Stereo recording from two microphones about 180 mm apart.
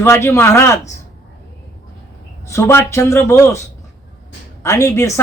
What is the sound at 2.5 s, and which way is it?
A man's voice, 15° left (ahead or behind).